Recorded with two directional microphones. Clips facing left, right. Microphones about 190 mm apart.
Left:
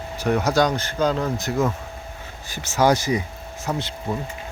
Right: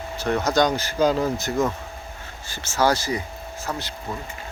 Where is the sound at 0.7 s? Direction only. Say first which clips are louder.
Right 1 dB; 5° right (ahead or behind).